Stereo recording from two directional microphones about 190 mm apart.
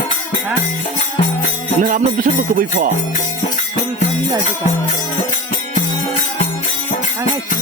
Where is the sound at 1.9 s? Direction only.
45° right (ahead or behind).